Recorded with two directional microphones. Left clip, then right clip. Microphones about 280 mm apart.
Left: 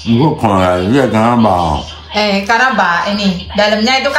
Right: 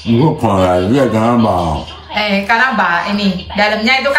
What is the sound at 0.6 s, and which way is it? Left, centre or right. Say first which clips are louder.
A woman's voice: even; centre.